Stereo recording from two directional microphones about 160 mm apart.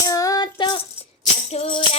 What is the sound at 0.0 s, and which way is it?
Music, 20° left (ahead or behind).